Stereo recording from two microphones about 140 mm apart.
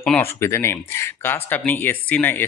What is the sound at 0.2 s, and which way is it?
Speech, 20° left (ahead or behind).